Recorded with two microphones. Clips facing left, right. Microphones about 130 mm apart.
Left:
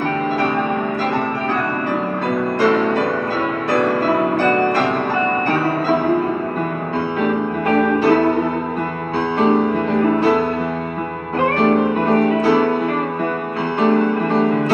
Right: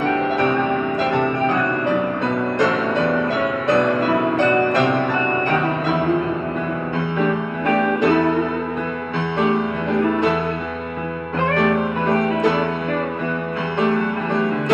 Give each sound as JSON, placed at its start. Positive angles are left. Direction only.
{"t": 4.4, "sound": "music", "side_deg": -20}
{"t": 8.0, "sound": "music", "side_deg": 35}
{"t": 9.4, "sound": "music", "side_deg": 30}
{"t": 11.5, "sound": "music", "side_deg": 30}
{"t": 13.7, "sound": "music", "side_deg": 30}